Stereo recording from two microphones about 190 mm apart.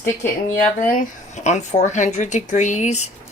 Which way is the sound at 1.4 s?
35° left (ahead or behind).